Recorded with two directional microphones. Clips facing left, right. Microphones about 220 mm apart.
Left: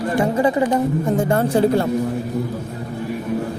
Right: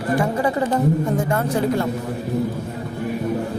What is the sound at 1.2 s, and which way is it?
Speech, 30° left (ahead or behind).